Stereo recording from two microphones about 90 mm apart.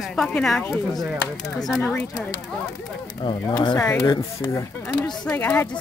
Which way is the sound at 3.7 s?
35° left (ahead or behind).